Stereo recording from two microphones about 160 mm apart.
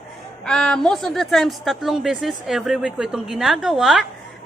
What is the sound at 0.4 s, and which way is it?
A woman's voice, 5° left (ahead or behind).